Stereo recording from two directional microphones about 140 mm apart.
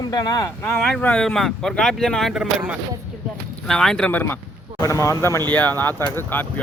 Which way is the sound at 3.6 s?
5° left (ahead or behind).